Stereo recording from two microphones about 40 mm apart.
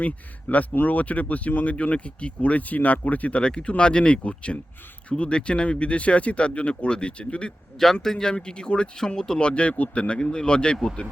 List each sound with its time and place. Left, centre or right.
0.0 s speech: left
8.0 s speech: centre; by 10.0 s left
10.0 s speech: left